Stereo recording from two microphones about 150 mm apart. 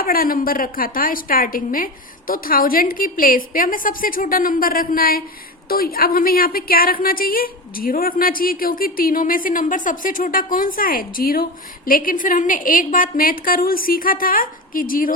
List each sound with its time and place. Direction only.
0.0 s a woman's voice: 75° left (ahead or behind)